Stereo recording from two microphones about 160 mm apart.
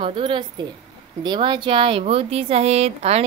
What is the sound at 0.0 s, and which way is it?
A woman's voice, 30° right (ahead or behind).